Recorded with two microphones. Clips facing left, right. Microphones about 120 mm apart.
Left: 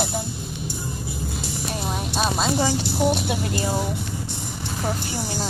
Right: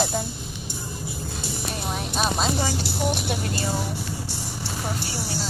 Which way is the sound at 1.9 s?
Centre (ahead or behind).